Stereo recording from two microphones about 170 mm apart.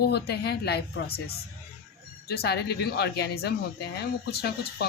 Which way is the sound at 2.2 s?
70° left (ahead or behind).